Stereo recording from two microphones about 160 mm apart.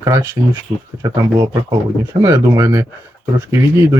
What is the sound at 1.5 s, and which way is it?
Speech, 20° right (ahead or behind).